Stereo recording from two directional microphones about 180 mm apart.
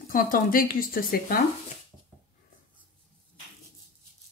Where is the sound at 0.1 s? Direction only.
50° left (ahead or behind).